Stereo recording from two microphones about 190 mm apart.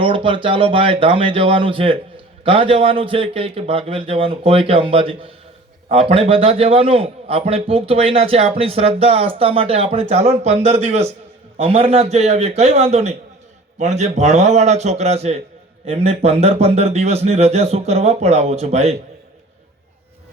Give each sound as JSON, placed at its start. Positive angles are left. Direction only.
{"t": 0.0, "sound": "a man's voice", "side_deg": -25}